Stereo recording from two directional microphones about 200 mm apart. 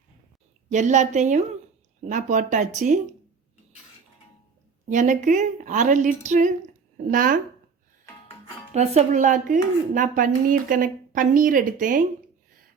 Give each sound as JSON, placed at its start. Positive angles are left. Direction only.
{"t": 0.7, "sound": "speech", "side_deg": -35}
{"t": 4.9, "sound": "speech", "side_deg": -40}
{"t": 8.7, "sound": "speech", "side_deg": -35}